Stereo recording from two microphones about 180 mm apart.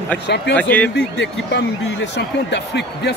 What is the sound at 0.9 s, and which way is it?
Speech, 70° left (ahead or behind).